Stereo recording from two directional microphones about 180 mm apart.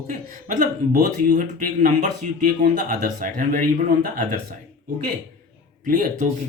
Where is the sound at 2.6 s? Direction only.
50° right (ahead or behind).